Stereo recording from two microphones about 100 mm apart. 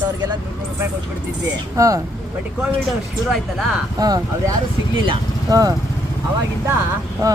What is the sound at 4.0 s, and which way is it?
Speech, 40° right (ahead or behind).